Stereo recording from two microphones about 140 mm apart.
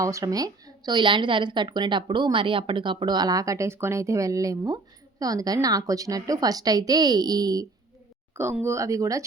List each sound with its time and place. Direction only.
0.0 s a woman's voice: 25° right (ahead or behind)
8.3 s a sound: 20° right (ahead or behind)
8.6 s a woman's voice: 20° right (ahead or behind)